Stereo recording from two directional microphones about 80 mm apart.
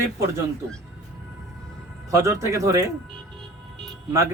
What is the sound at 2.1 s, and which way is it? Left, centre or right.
Speech, right.